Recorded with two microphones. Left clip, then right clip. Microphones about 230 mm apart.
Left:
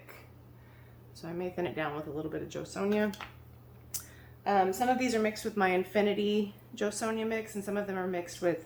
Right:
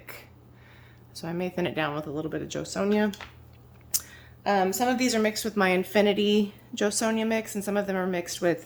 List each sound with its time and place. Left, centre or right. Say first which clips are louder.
1.2 s a woman's voice: right 5 dB; right
3.9 s a woman's voice: right 11 dB; right